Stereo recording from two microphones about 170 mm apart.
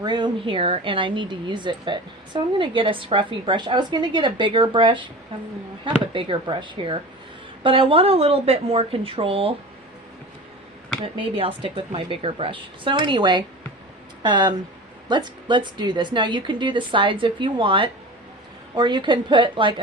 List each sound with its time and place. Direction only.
0.0 s speech: 25° right (ahead or behind)
6.1 s speech: 30° right (ahead or behind)
11.0 s speech: 35° right (ahead or behind)